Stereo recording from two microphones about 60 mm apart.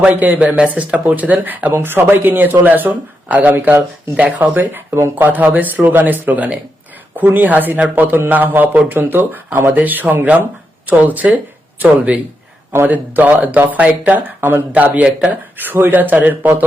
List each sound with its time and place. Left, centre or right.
0.0 s speech: right
3.5 s speech: right
14.9 s speech: right
15.5 s speech: right